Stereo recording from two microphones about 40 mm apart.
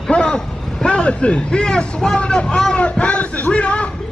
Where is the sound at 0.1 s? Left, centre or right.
Left.